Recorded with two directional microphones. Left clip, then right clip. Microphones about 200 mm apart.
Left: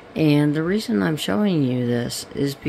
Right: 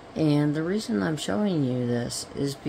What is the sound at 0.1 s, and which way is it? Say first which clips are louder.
Speech: left 5 dB; 25° left (ahead or behind).